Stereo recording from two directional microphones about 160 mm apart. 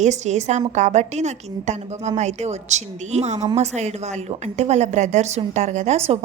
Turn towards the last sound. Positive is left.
turn(degrees=-40)  # may be behind; listen again after turning